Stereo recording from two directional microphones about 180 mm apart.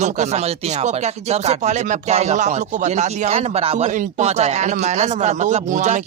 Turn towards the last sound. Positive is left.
turn(degrees=-45)  # may be behind; listen again after turning